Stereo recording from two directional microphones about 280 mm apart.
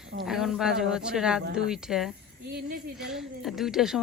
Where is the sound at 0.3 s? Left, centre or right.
Centre.